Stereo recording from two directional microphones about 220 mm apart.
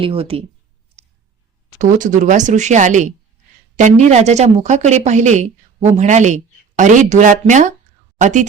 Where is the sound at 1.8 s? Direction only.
35° right (ahead or behind).